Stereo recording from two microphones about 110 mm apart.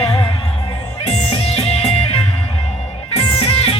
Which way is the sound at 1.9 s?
65° left (ahead or behind).